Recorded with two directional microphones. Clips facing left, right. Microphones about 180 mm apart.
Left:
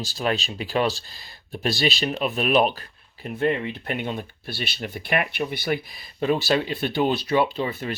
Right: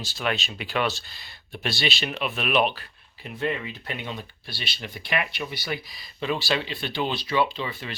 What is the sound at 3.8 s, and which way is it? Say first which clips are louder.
Speech: left 6 dB; 50° left (ahead or behind).